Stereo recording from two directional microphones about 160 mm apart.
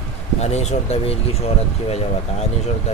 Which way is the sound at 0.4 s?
45° left (ahead or behind).